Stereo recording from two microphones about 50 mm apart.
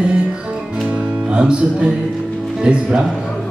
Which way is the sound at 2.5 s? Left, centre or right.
Centre.